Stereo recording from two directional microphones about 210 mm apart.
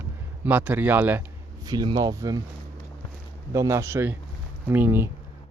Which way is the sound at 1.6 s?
20° right (ahead or behind).